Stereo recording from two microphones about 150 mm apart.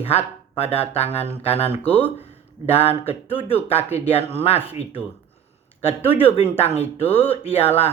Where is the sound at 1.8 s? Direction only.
10° left (ahead or behind).